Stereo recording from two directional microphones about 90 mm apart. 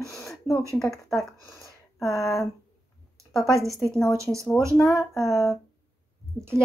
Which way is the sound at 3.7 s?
5° left (ahead or behind).